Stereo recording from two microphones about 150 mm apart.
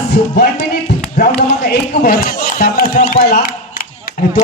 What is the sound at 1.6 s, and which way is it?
Speech, 90° left.